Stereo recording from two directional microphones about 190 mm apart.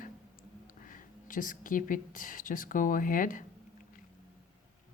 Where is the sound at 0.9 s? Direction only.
45° left (ahead or behind).